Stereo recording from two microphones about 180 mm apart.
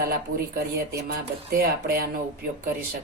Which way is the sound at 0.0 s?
55° right (ahead or behind).